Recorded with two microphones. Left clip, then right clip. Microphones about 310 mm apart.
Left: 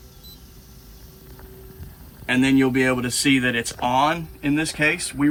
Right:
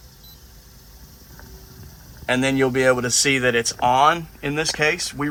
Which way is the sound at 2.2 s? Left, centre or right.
Right.